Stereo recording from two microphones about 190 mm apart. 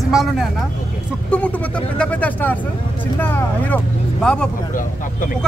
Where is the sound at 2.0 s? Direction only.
5° left (ahead or behind).